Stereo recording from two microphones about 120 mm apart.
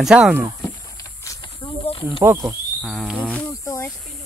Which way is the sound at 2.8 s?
Centre (ahead or behind).